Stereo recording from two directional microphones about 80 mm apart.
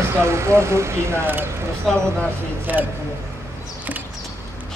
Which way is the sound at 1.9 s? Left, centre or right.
Centre.